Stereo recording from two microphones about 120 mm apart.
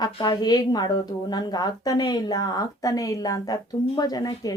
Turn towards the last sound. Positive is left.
turn(degrees=35)  # may be behind; listen again after turning